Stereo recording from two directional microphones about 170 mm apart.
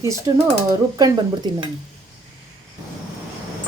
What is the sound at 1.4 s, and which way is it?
Speech, 25° right (ahead or behind).